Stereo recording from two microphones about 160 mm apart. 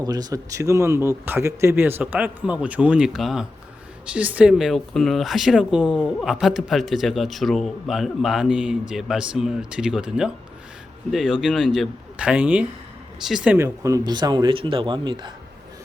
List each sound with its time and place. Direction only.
0.0 s speech: 25° right (ahead or behind); by 13.6 s 5° right (ahead or behind)
13.6 s speech: 20° right (ahead or behind)